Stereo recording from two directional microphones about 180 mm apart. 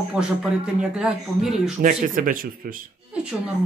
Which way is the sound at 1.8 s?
50° right (ahead or behind).